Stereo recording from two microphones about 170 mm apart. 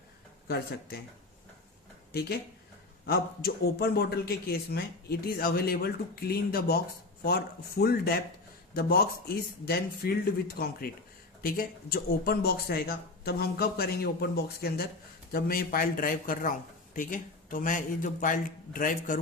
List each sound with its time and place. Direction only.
0.4 s a man's voice: 65° left (ahead or behind)
3.1 s a man's voice: 65° left (ahead or behind)